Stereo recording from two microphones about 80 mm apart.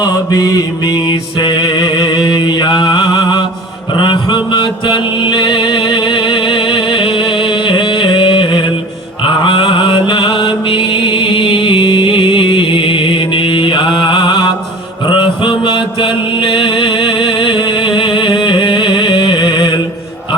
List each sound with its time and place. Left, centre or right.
0.0 s mantra: left
1.4 s music: left
3.9 s mantra: left